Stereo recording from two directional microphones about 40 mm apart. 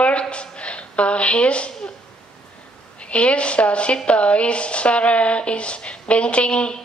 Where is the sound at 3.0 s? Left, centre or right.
Left.